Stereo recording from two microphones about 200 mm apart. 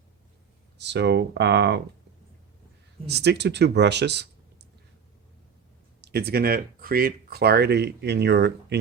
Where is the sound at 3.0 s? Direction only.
55° right (ahead or behind).